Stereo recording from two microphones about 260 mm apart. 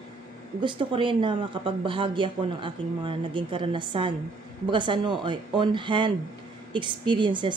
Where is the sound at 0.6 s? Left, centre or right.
Centre.